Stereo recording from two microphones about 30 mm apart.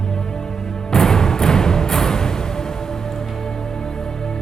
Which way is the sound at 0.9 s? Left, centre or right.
Centre.